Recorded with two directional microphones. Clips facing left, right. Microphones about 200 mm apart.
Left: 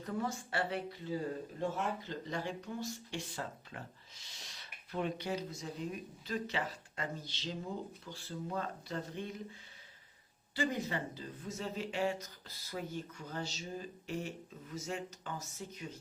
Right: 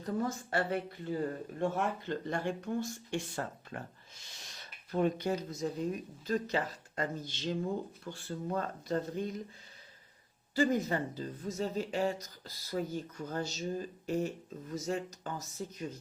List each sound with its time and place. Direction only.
0.0 s speech: 40° right (ahead or behind)
10.5 s speech: 45° right (ahead or behind)